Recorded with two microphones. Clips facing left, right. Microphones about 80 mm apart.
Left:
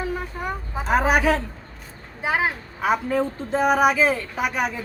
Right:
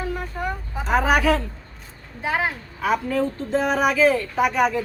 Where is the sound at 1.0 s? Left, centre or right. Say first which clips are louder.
Even; left.